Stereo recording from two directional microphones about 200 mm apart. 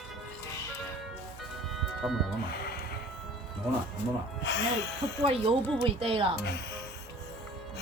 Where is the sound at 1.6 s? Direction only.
Centre (ahead or behind).